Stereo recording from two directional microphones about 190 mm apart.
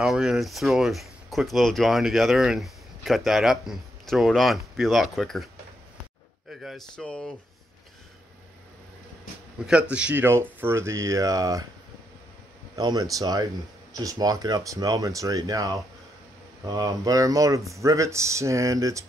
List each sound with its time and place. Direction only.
0.0 s speech: centre (ahead or behind)
6.5 s speech: centre (ahead or behind)
9.7 s speech: 5° right (ahead or behind)
12.7 s speech: 20° right (ahead or behind)